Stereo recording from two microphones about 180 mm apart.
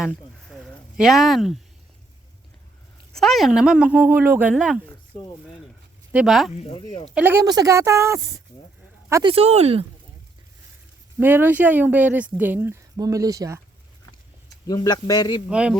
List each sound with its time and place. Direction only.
0.0 s a sound: centre (ahead or behind)
3.1 s speech: centre (ahead or behind)
5.1 s speech: 25° left (ahead or behind)
6.1 s speech: centre (ahead or behind)
6.7 s speech: 30° left (ahead or behind)
7.1 s speech: 10° right (ahead or behind)
7.4 s speech: 20° right (ahead or behind)
9.2 s speech: 35° right (ahead or behind)
11.2 s speech: 10° right (ahead or behind)
14.7 s speech: 20° left (ahead or behind)
15.4 s speech: 5° right (ahead or behind)